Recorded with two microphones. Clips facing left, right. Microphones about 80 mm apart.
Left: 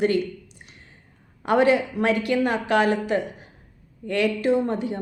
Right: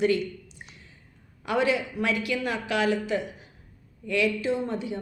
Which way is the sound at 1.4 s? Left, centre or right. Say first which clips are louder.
Left 6 dB; left.